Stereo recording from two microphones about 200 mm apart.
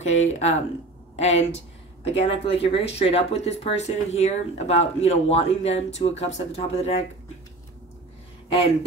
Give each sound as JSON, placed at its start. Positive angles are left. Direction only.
{"t": 0.0, "sound": "speech", "side_deg": 35}